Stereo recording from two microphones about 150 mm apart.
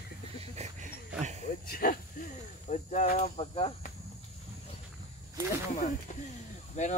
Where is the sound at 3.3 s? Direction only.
40° left (ahead or behind).